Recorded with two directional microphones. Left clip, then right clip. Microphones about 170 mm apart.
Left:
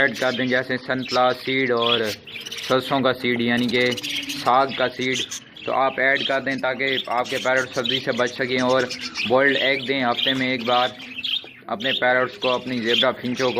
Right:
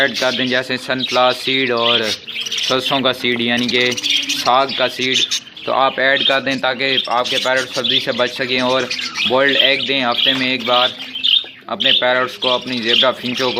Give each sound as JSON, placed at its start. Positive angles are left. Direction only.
{"t": 0.0, "sound": "speech", "side_deg": -20}
{"t": 2.6, "sound": "speech", "side_deg": -10}
{"t": 5.6, "sound": "speech", "side_deg": -25}